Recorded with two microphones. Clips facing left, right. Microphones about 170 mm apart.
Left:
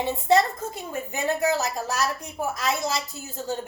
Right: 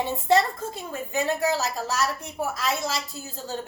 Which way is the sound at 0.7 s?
20° left (ahead or behind).